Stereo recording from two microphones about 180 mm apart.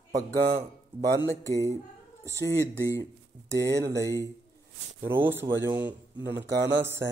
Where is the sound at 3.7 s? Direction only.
70° right (ahead or behind).